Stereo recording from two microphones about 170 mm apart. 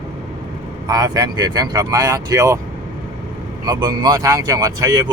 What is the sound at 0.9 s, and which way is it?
Speech, 20° right (ahead or behind).